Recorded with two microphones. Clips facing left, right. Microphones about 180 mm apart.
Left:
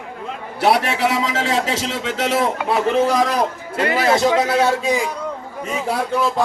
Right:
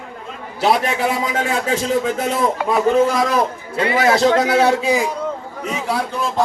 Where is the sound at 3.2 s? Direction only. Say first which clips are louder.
Right 1 dB; 50° right (ahead or behind).